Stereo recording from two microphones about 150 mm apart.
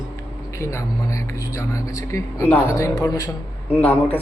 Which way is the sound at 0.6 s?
20° left (ahead or behind).